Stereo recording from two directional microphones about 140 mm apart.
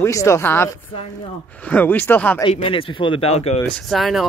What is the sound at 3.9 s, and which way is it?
Speech, centre (ahead or behind).